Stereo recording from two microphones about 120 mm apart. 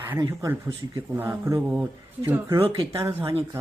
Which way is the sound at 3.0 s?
25° right (ahead or behind).